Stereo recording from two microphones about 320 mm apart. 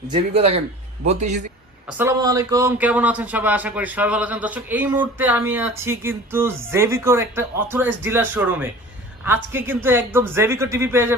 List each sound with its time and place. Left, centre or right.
0.1 s a man's voice: centre
1.9 s a man's voice: centre